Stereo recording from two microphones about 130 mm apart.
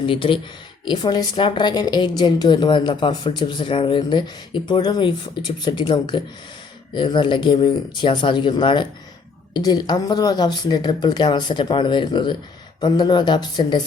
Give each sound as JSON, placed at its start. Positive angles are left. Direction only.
{"t": 0.0, "sound": "a woman's voice", "side_deg": 40}